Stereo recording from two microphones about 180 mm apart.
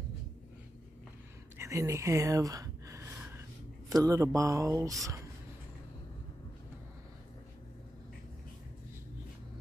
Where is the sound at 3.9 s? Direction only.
20° right (ahead or behind).